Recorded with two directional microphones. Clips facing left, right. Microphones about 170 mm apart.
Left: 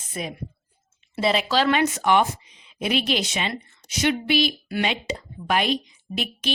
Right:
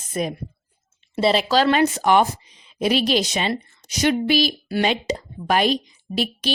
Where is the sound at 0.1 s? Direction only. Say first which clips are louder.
Right 6 dB; 40° right (ahead or behind).